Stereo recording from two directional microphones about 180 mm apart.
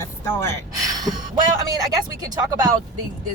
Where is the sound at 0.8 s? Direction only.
20° right (ahead or behind).